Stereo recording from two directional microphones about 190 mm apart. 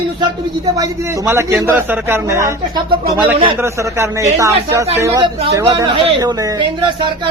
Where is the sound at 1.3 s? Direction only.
15° right (ahead or behind).